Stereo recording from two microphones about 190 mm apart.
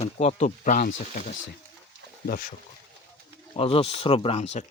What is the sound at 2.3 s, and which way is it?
Speech, 45° left (ahead or behind).